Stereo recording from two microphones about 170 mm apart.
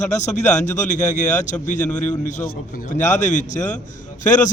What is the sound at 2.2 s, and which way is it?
A man's voice, 45° left (ahead or behind).